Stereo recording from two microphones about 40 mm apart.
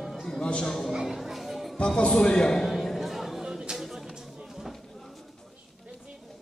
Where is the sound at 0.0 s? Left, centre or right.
Centre.